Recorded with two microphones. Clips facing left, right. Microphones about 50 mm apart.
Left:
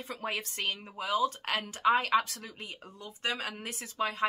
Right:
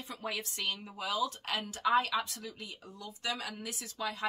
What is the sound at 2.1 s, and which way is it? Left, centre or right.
Speech, left.